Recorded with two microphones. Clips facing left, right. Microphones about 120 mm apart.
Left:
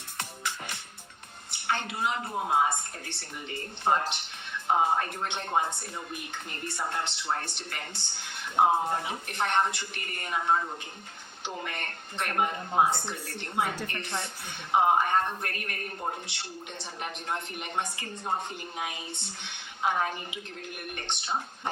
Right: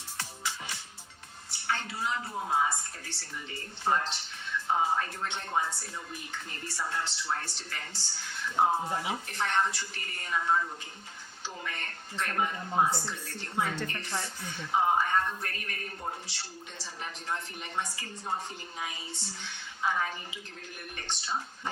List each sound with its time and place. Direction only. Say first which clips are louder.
0.2 s music: left 2 dB; 60° left (ahead or behind)
1.5 s a woman's voice: left 3 dB; 60° left (ahead or behind)
3.9 s music: left 2 dB; 55° left (ahead or behind)
4.8 s a woman's voice: left 3 dB; 55° left (ahead or behind)
8.6 s speech: left 4 dB; 20° left (ahead or behind)
9.2 s a woman's voice: left 4 dB; 60° left (ahead or behind)
12.7 s speech: left 2 dB; 20° left (ahead or behind)
14.7 s a woman's voice: left 3 dB; 55° left (ahead or behind)